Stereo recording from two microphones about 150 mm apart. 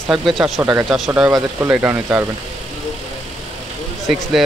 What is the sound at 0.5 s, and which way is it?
Speech, 20° right (ahead or behind).